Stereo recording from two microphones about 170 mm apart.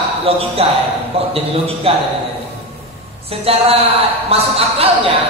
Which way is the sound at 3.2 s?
35° right (ahead or behind).